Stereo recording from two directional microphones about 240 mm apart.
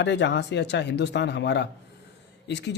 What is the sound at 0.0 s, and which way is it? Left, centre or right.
Speech, left.